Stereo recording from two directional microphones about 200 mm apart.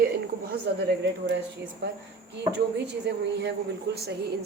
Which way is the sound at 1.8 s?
55° right (ahead or behind).